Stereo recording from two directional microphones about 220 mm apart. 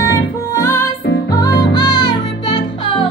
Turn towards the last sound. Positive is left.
turn(degrees=25)  # may be behind; listen again after turning